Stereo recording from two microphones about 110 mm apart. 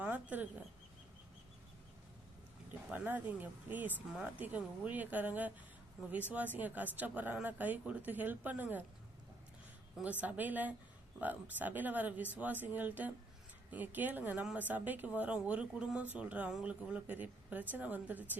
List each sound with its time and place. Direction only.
0.0 s a sound: 15° right (ahead or behind)
2.9 s speech: 15° right (ahead or behind)
10.0 s speech: 15° right (ahead or behind)